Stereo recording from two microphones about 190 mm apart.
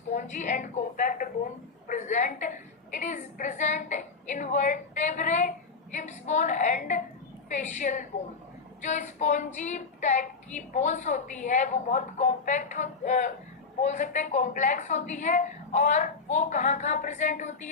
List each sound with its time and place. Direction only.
0.1 s a woman's voice: 40° left (ahead or behind)